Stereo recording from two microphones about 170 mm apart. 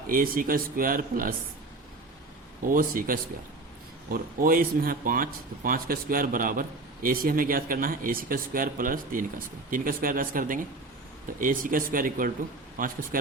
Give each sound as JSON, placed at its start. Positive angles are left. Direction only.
{"t": 0.1, "sound": "speech", "side_deg": -55}
{"t": 2.6, "sound": "speech", "side_deg": -55}